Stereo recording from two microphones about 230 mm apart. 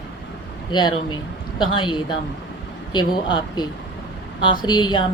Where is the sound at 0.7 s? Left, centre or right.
Centre.